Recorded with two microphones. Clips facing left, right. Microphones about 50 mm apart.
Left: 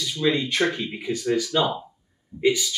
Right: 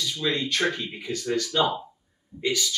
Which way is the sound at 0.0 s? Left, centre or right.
Centre.